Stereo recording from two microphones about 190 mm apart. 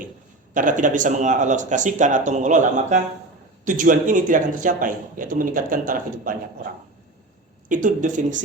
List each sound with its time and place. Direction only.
0.5 s a man's voice: 45° right (ahead or behind)
7.7 s a man's voice: 45° right (ahead or behind)